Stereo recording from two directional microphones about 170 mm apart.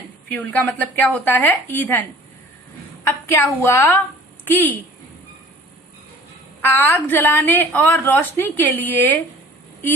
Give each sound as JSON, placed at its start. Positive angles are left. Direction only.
{"t": 0.3, "sound": "a woman's voice", "side_deg": 10}
{"t": 6.6, "sound": "a woman's voice", "side_deg": 10}